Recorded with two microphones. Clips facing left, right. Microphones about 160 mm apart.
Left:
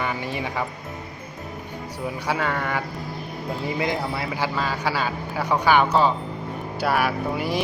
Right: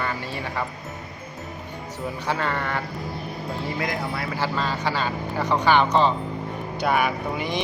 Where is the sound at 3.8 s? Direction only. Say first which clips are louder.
Left 3 dB; 25° left (ahead or behind).